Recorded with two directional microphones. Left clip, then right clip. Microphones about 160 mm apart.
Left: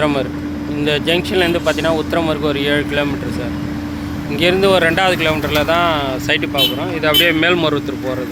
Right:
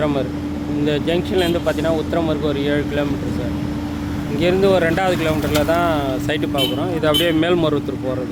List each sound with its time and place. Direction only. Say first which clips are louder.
0.0 s speech: left 3 dB; 5° left (ahead or behind)
4.4 s speech: left 3 dB; 5° right (ahead or behind); by 7.8 s 25° right (ahead or behind)